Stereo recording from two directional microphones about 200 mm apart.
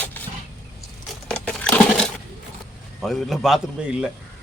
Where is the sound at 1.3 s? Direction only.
5° left (ahead or behind).